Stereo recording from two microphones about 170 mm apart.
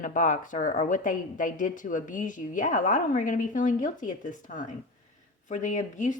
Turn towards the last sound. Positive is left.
turn(degrees=45)  # may be behind; listen again after turning